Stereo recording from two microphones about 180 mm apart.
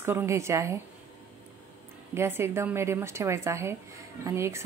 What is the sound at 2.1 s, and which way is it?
A woman's voice, 15° right (ahead or behind).